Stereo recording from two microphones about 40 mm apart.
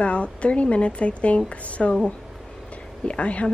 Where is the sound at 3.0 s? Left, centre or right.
Left.